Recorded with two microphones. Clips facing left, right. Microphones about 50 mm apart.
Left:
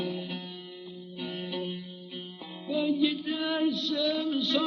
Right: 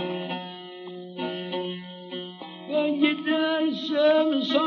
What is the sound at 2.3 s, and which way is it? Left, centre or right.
Music, right.